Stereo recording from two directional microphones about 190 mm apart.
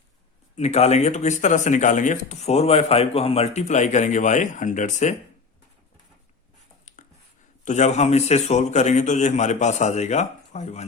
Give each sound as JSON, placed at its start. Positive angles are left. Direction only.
{"t": 0.5, "sound": "speech", "side_deg": 35}
{"t": 6.9, "sound": "a sound", "side_deg": 40}
{"t": 7.6, "sound": "speech", "side_deg": 40}